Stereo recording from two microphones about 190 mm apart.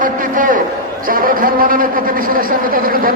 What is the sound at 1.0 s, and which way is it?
A man's voice, 50° right (ahead or behind).